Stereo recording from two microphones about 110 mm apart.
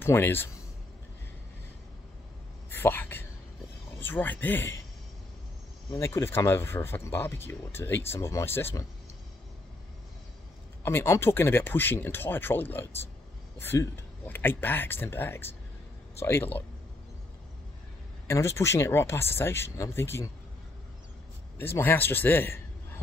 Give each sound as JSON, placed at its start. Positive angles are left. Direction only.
{"t": 0.0, "sound": "speech", "side_deg": 20}
{"t": 2.7, "sound": "speech", "side_deg": 20}
{"t": 5.9, "sound": "speech", "side_deg": 25}
{"t": 10.8, "sound": "speech", "side_deg": 20}
{"t": 18.2, "sound": "speech", "side_deg": 25}
{"t": 21.5, "sound": "a man's voice", "side_deg": 20}